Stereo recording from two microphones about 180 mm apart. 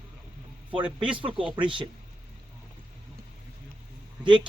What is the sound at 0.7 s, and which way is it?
Speech, 30° right (ahead or behind).